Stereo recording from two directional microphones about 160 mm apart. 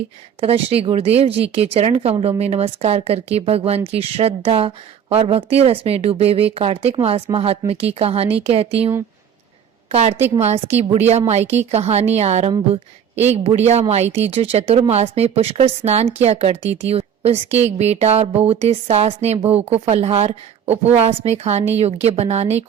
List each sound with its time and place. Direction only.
0.3 s speech: 35° right (ahead or behind)
9.9 s a woman's voice: 40° right (ahead or behind)